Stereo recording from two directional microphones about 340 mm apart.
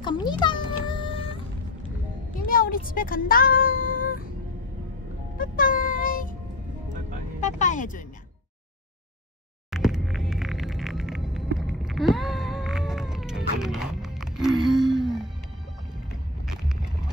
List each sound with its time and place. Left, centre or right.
0.0 s cat: centre
2.4 s speech: left
5.4 s music: left
7.3 s vehicle: left
9.7 s a sound: centre
15.0 s music: centre
16.4 s vehicle: centre